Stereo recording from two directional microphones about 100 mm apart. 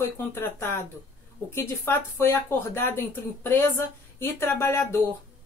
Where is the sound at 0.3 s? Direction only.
25° left (ahead or behind).